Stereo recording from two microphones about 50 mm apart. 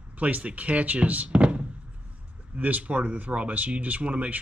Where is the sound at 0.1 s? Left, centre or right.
Right.